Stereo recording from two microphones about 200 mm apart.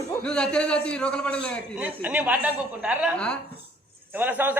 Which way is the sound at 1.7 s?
10° right (ahead or behind).